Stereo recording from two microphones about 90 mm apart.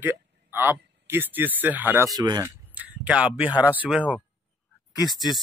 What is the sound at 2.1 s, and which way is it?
Speech, 50° right (ahead or behind).